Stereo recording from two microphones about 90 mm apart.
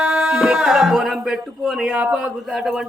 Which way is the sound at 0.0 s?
10° right (ahead or behind).